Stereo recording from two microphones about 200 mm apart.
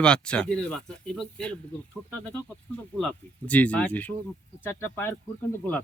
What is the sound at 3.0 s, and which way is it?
Speech, 5° left (ahead or behind).